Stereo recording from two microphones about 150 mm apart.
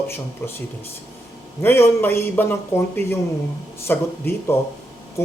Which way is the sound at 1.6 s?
15° left (ahead or behind).